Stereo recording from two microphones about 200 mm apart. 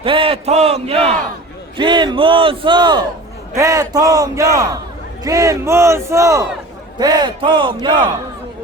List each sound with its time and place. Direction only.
0.0 s a man's voice: 25° right (ahead or behind)